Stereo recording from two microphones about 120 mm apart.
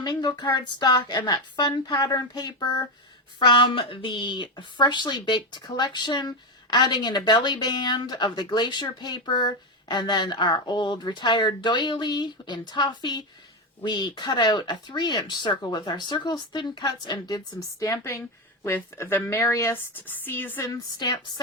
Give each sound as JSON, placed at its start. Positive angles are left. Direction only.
{"t": 0.0, "sound": "a woman's voice", "side_deg": 35}
{"t": 20.7, "sound": "a woman's voice", "side_deg": 35}